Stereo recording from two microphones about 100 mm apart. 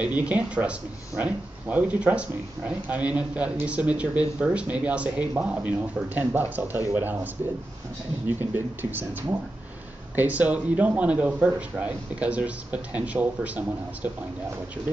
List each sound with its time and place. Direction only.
0.0 s speech: 15° right (ahead or behind)
10.1 s speech: 15° right (ahead or behind)